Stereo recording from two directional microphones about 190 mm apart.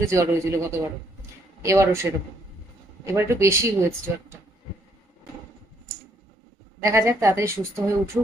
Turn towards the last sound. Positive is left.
turn(degrees=-15)  # may be behind; listen again after turning